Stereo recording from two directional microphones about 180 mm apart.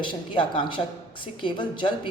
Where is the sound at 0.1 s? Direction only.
25° left (ahead or behind).